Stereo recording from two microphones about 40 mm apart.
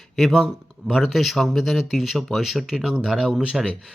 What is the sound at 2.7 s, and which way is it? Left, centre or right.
Speech, centre.